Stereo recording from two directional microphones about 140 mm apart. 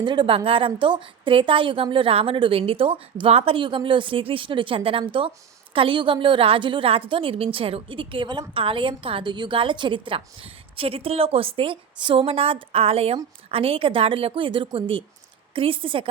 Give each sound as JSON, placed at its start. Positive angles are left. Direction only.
{"t": 0.0, "sound": "a woman's voice", "side_deg": -35}